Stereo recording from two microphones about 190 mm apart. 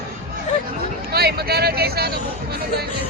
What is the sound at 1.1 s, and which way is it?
Speech, 55° right (ahead or behind).